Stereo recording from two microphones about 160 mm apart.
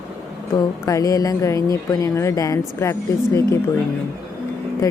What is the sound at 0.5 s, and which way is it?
Speech, 20° left (ahead or behind).